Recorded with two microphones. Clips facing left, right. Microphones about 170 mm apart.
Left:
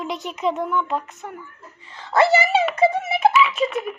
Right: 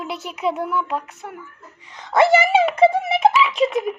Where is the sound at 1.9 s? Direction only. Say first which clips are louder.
Right 2 dB; 15° right (ahead or behind).